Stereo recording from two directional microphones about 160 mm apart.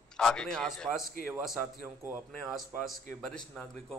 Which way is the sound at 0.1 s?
5° left (ahead or behind).